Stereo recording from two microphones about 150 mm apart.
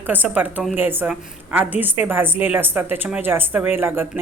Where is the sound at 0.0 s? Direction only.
10° right (ahead or behind).